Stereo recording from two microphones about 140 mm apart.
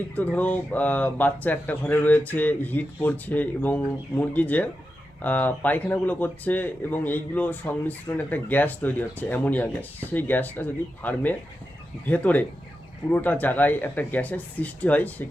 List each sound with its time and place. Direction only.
0.2 s speech: 10° left (ahead or behind)